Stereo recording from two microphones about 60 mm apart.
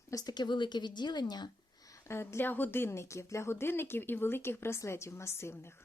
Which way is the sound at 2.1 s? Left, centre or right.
Left.